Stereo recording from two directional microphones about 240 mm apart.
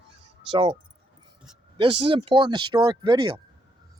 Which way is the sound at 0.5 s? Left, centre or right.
Right.